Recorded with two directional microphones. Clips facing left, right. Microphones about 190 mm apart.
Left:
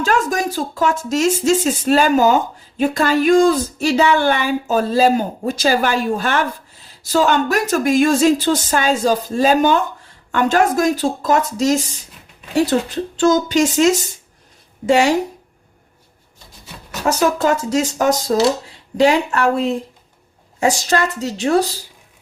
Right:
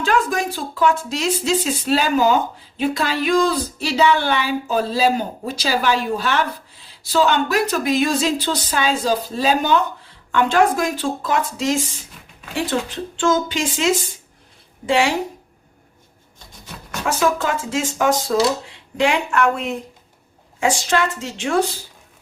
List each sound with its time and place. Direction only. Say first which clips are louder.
0.0 s a woman's voice: left 2 dB; 45° left (ahead or behind)
17.1 s a woman's voice: left 4 dB; 40° left (ahead or behind)